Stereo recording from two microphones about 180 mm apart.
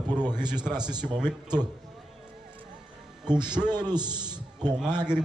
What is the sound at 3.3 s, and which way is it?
A man's voice, 25° right (ahead or behind).